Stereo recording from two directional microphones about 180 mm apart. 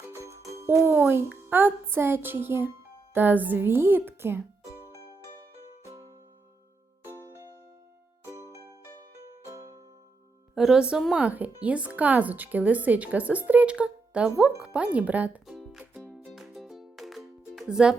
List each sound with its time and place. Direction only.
0.1 s music: 15° right (ahead or behind)
0.7 s speech: 10° right (ahead or behind)
8.3 s music: 15° right (ahead or behind)
10.5 s speech: 5° right (ahead or behind)
16.3 s music: centre (ahead or behind)